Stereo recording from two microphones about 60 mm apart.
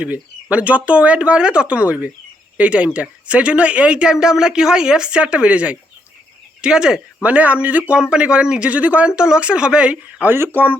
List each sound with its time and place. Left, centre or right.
0.5 s speech: right
7.2 s speech: right
10.2 s speech: right